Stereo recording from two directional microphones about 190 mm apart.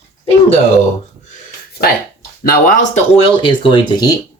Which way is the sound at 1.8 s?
50° left (ahead or behind).